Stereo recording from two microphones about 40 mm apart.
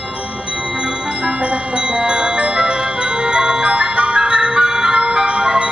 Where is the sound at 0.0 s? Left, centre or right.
Right.